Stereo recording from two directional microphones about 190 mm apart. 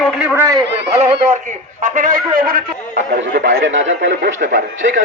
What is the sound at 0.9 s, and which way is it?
Speech, 30° right (ahead or behind).